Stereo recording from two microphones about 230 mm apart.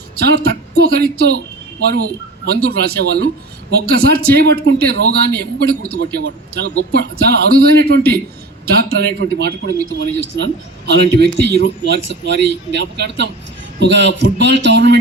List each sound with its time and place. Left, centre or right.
0.2 s a man's voice: right
2.6 s a man's voice: right